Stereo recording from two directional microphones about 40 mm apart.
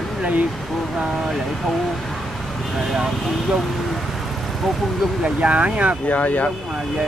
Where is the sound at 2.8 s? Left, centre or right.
Centre.